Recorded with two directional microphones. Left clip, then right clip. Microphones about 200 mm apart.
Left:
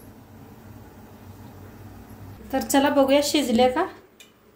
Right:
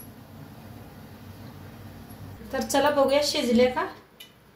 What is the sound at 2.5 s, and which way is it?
A woman's voice, 50° left (ahead or behind).